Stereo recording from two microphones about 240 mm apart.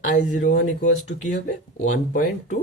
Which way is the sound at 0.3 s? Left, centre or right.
Left.